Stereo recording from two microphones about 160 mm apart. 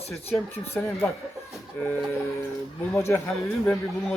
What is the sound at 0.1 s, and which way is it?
Speech, 15° left (ahead or behind).